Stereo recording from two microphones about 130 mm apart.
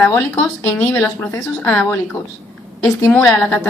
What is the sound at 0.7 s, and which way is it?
Speech, 10° left (ahead or behind).